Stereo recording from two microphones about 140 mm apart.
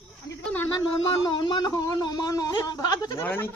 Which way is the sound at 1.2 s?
35° left (ahead or behind).